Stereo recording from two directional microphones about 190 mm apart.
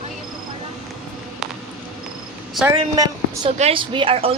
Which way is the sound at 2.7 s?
20° right (ahead or behind).